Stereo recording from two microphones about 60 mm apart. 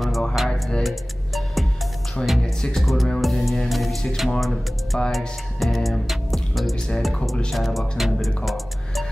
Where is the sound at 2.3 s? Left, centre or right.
Centre.